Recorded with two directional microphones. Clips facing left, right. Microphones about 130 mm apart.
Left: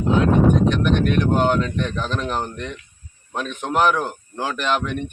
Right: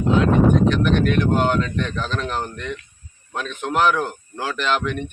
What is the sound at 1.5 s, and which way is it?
Speech, 15° left (ahead or behind).